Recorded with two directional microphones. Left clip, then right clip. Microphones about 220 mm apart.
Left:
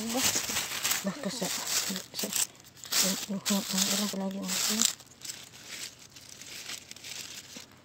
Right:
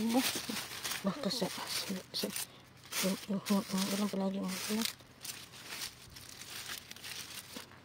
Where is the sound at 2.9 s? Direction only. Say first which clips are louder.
Left 8 dB; 50° left (ahead or behind).